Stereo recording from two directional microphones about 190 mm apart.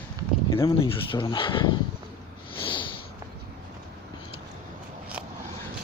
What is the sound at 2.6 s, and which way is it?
Snort, 25° left (ahead or behind).